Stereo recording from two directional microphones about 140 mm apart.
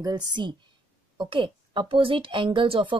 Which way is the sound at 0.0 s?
30° right (ahead or behind).